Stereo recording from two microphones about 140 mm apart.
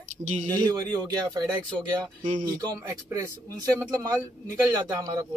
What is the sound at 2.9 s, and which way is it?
Speech, 20° right (ahead or behind).